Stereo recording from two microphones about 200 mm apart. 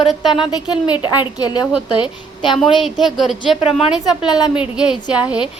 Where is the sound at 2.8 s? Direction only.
Centre (ahead or behind).